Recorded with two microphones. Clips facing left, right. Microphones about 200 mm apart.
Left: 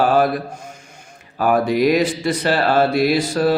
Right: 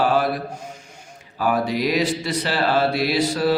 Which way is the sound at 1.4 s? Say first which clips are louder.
Left 5 dB; 50° left (ahead or behind).